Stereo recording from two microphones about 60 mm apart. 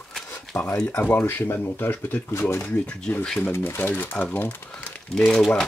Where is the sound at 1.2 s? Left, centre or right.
Left.